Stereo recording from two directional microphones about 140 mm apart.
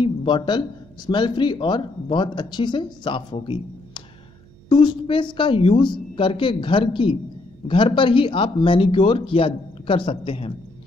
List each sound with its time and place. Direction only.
0.0 s speech: 35° left (ahead or behind)